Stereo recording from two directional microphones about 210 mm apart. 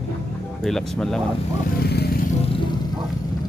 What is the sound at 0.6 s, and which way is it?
Speech, centre (ahead or behind).